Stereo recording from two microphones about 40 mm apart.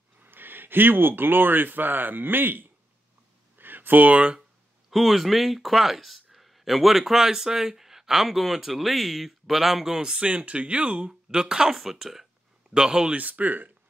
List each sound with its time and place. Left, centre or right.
0.2 s speech: right
3.5 s a sound: right
4.9 s speech: centre
10.2 s speech: right
11.1 s speech: centre
11.7 s speech: centre
12.7 s speech: centre
13.1 s speech: right